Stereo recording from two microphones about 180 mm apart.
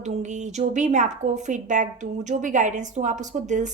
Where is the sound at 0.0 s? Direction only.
40° right (ahead or behind).